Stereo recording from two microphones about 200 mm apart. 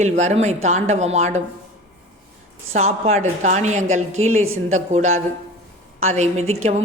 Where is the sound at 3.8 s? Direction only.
90° right.